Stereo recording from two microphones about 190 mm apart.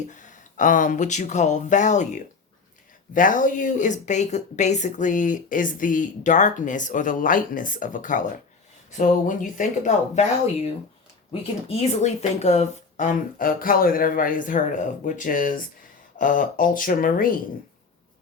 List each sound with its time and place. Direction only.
0.1 s a woman's voice: 40° left (ahead or behind)
11.8 s a woman's voice: 35° left (ahead or behind)